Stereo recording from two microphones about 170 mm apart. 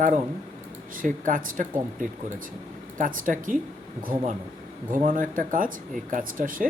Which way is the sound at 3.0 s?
50° right (ahead or behind).